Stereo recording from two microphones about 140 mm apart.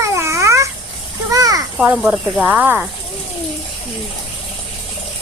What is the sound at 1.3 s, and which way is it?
Children playing, 25° right (ahead or behind).